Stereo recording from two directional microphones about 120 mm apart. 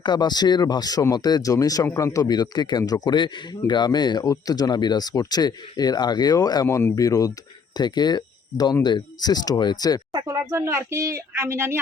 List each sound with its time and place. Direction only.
0.0 s speech: 40° left (ahead or behind)
10.2 s a woman's voice: 25° right (ahead or behind)